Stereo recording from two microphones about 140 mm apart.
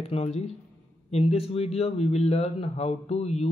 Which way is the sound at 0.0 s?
45° left (ahead or behind).